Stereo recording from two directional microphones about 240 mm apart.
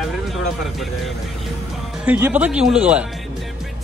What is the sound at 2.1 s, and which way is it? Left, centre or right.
Speech, centre.